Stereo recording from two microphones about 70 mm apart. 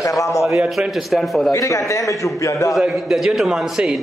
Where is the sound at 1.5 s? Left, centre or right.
Left.